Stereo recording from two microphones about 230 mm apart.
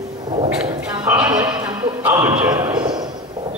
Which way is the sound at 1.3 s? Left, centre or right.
Centre.